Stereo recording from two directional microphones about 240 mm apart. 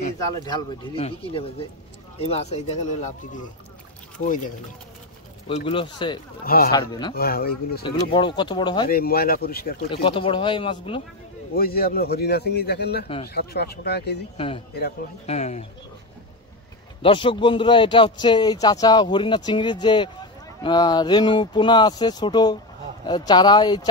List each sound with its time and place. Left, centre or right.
0.5 s speech: left
4.2 s speech: left
5.5 s speech: left
6.4 s speech: left
6.7 s speech: centre
7.2 s speech: left
7.8 s speech: left
8.8 s speech: left
10.0 s speech: left
11.5 s speech: left
14.3 s speech: left
17.0 s speech: left